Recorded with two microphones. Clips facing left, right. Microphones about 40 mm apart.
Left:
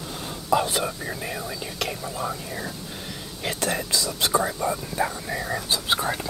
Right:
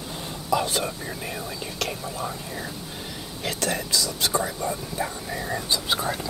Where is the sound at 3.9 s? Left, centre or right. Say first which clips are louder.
Even; left.